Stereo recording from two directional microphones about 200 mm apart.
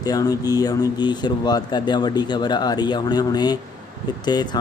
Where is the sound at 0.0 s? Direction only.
20° left (ahead or behind).